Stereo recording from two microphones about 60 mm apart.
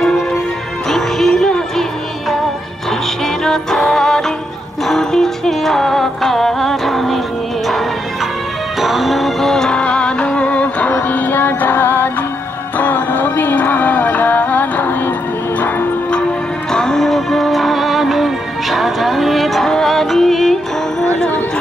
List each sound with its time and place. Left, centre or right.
0.8 s music: centre
3.4 s music: centre
8.8 s music: centre; by 10.9 s left
10.9 s music: left
16.7 s music: centre